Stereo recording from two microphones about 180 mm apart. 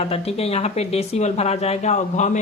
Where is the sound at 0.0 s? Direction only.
35° left (ahead or behind).